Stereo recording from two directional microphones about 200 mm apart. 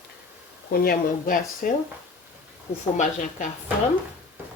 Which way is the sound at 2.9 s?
40° left (ahead or behind).